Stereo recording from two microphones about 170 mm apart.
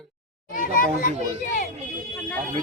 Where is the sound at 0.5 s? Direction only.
55° left (ahead or behind).